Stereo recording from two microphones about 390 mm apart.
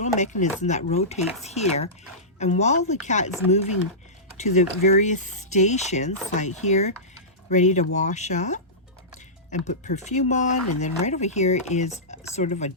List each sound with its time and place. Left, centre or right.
0.2 s speech: centre